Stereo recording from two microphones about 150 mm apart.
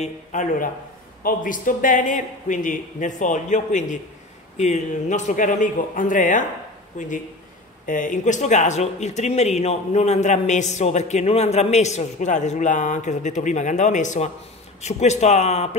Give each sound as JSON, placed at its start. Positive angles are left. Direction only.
{"t": 0.0, "sound": "a man's voice", "side_deg": 55}